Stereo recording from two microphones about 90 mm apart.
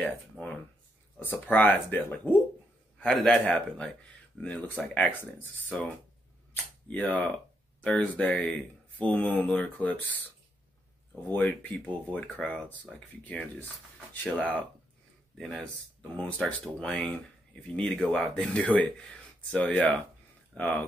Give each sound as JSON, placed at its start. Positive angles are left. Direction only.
{"t": 0.0, "sound": "speech", "side_deg": 15}
{"t": 3.0, "sound": "speech", "side_deg": 5}
{"t": 6.5, "sound": "speech", "side_deg": 20}
{"t": 11.2, "sound": "speech", "side_deg": 20}